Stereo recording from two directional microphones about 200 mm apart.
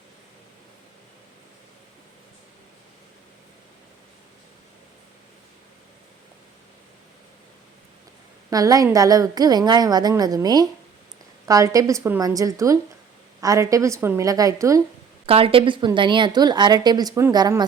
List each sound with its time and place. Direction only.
8.4 s a woman's voice: 15° right (ahead or behind)
15.3 s a woman's voice: 30° right (ahead or behind)